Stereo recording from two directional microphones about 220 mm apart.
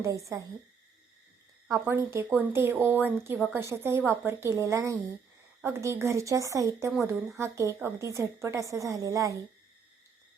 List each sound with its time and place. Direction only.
0.0 s a woman's voice: 15° right (ahead or behind)
1.6 s a woman's voice: 10° right (ahead or behind)